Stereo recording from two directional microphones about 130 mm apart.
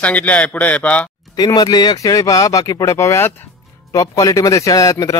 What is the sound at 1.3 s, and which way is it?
Speech, 30° left (ahead or behind).